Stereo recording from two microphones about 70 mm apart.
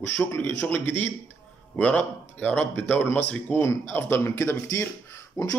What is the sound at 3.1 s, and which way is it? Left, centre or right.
Speech, left.